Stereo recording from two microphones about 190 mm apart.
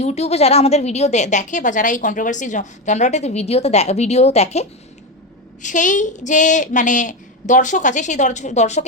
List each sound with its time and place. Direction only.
0.0 s a woman's voice: 35° left (ahead or behind)
5.6 s a woman's voice: 40° left (ahead or behind)